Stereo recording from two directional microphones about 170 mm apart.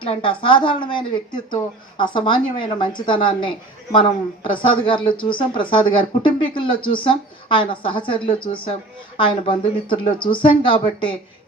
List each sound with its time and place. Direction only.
0.0 s speech: 30° left (ahead or behind)